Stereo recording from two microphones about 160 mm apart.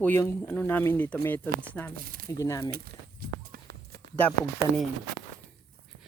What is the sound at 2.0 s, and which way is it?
Speech, 65° right (ahead or behind).